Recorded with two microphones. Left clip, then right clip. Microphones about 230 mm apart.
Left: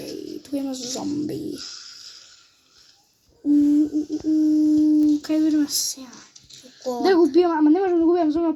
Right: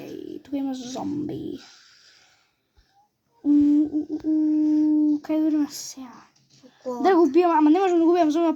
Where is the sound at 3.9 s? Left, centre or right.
Right.